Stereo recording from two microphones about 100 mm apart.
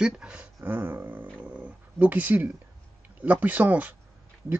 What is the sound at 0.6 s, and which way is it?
Speech, 20° right (ahead or behind).